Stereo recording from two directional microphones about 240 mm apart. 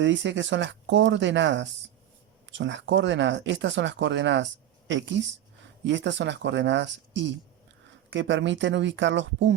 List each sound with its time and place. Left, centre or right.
0.0 s speech: right